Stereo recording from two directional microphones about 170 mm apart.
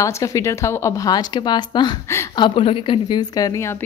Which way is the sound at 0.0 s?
20° left (ahead or behind).